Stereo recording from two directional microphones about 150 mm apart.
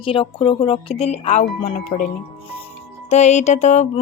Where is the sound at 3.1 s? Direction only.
50° left (ahead or behind).